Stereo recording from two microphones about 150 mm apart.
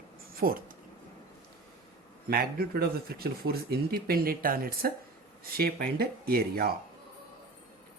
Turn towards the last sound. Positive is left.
turn(degrees=-85)